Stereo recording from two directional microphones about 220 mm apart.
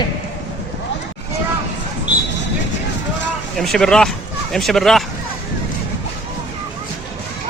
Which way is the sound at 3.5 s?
Centre (ahead or behind).